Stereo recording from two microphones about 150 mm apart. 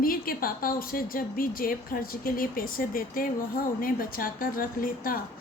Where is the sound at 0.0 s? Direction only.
70° left (ahead or behind).